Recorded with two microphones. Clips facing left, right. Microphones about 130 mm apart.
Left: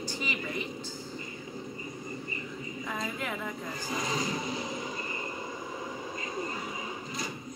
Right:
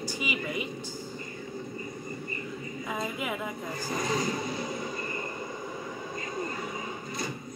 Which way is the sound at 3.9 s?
45° right (ahead or behind).